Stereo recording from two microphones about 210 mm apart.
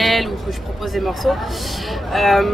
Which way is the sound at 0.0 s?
Centre (ahead or behind).